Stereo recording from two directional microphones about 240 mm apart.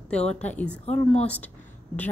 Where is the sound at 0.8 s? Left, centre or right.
Left.